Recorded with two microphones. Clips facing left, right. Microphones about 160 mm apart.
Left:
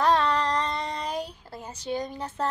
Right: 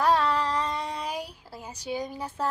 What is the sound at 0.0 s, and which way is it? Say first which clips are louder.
Child singing: left 1 dB; 5° right (ahead or behind).